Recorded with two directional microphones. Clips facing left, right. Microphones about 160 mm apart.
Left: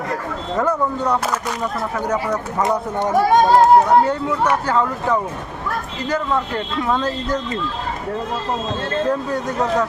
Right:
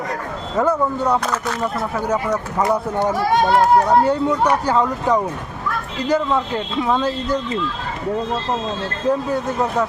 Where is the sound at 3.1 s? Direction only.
45° left (ahead or behind).